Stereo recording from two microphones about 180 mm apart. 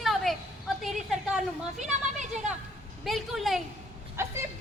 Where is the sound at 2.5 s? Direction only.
40° right (ahead or behind).